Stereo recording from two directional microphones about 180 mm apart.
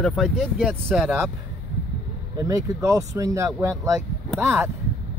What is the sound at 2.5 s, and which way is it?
Speech, 20° right (ahead or behind).